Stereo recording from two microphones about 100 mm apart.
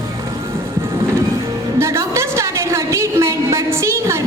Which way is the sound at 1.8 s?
30° right (ahead or behind).